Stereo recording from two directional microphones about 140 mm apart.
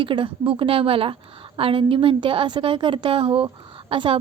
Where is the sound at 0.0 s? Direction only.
40° right (ahead or behind).